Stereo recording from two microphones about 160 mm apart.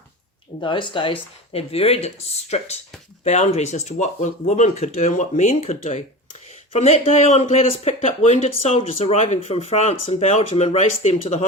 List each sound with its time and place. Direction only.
0.6 s speech: 30° left (ahead or behind)